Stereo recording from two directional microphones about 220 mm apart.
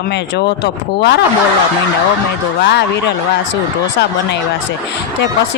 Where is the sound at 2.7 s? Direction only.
50° left (ahead or behind).